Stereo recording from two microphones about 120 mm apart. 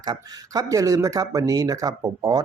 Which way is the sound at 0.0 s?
30° right (ahead or behind).